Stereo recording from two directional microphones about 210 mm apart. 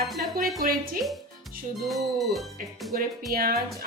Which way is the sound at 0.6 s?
45° right (ahead or behind).